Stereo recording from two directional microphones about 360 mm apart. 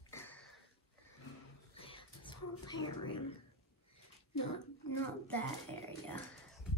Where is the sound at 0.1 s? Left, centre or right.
Centre.